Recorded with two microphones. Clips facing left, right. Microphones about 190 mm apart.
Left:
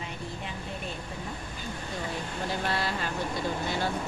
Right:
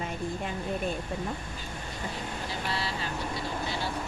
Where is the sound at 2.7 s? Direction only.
50° left (ahead or behind).